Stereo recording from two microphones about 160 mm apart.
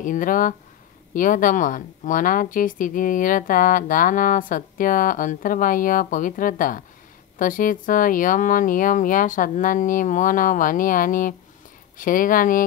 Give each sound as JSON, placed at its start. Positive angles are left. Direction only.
{"t": 0.0, "sound": "speech", "side_deg": 55}